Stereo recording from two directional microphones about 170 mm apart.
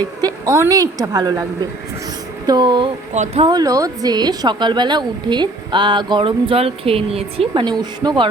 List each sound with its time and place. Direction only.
0.0 s a woman's voice: 20° right (ahead or behind)
2.5 s speech: 25° right (ahead or behind)
3.1 s speech: 40° right (ahead or behind)
3.4 s speech: 20° right (ahead or behind)